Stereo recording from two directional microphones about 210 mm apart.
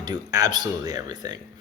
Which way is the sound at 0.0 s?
20° right (ahead or behind).